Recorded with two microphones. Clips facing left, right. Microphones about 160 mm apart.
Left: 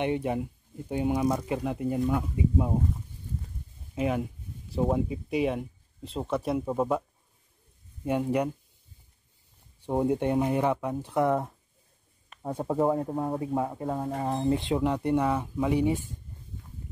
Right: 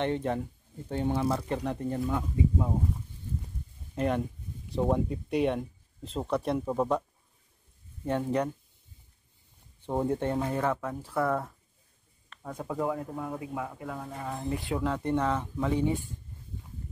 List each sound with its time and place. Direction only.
0.0 s speech: 10° left (ahead or behind)
3.9 s speech: 5° left (ahead or behind)
9.8 s speech: 15° left (ahead or behind)
12.4 s speech: 30° left (ahead or behind)
14.5 s speech: 20° left (ahead or behind)